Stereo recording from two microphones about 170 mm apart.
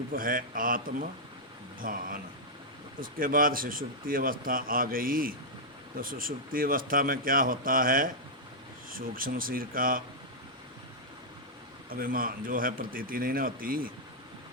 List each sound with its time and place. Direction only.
0.1 s speech: 55° right (ahead or behind)
11.9 s speech: 60° right (ahead or behind)